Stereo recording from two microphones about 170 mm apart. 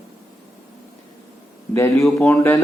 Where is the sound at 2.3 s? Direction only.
15° left (ahead or behind).